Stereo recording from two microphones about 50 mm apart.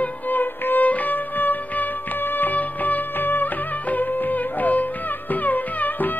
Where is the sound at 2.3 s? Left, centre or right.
Left.